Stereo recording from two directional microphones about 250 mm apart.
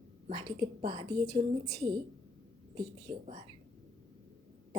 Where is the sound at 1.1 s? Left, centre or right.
Centre.